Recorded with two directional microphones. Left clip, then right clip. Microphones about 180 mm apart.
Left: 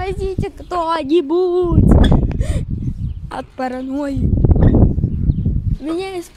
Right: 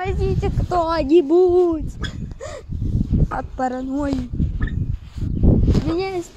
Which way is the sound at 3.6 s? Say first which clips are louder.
Left 2 dB; 20° left (ahead or behind).